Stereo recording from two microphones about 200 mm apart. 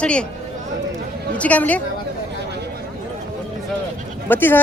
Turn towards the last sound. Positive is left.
turn(degrees=10)  # may be behind; listen again after turning